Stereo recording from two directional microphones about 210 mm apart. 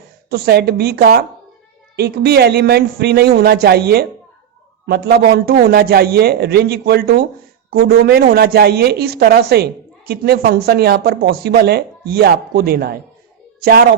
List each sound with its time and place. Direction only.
0.3 s speech: 50° right (ahead or behind)